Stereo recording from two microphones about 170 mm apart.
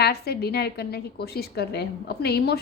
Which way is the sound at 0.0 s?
70° left (ahead or behind).